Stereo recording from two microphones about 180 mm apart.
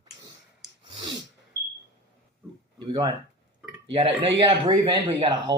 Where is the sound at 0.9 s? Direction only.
25° right (ahead or behind).